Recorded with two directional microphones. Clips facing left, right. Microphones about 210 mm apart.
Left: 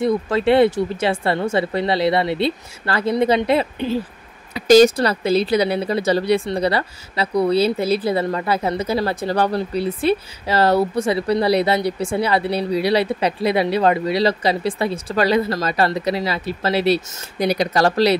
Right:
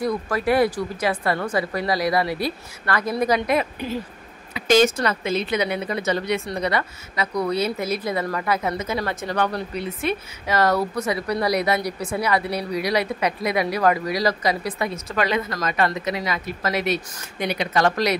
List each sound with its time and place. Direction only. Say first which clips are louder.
0.0 s speech: left 5 dB; 25° left (ahead or behind)